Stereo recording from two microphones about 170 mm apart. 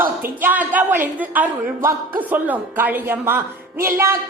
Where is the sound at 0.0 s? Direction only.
10° right (ahead or behind).